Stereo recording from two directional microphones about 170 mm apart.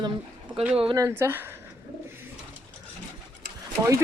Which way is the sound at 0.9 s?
15° right (ahead or behind).